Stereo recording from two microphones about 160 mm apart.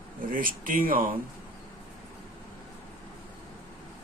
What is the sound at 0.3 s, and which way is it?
Speech, 60° right (ahead or behind).